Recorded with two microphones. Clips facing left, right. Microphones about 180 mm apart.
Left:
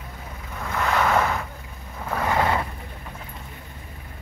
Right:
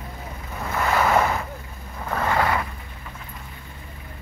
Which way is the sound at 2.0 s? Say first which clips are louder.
Right 1 dB; 10° left (ahead or behind).